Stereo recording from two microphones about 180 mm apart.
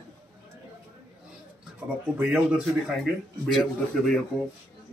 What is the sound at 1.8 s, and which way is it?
A man's voice, 5° right (ahead or behind).